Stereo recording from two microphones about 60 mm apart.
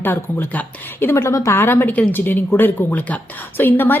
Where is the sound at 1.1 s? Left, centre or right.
Left.